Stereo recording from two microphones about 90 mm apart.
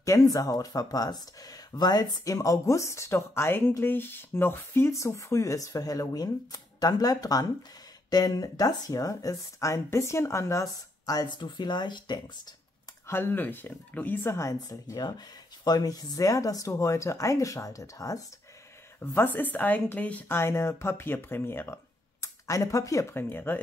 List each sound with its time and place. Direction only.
0.0 s speech: 40° left (ahead or behind)
11.2 s speech: 60° left (ahead or behind)
13.0 s a woman's voice: 25° left (ahead or behind)
14.3 s speech: 35° left (ahead or behind)
18.9 s a woman's voice: 20° left (ahead or behind)
20.3 s a woman's voice: 25° left (ahead or behind)
22.2 s speech: 35° left (ahead or behind)
23.3 s a woman's voice: 25° left (ahead or behind)